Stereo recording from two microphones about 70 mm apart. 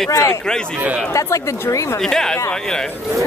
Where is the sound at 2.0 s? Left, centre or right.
Centre.